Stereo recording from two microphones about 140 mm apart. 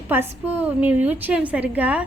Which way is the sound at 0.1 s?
15° right (ahead or behind).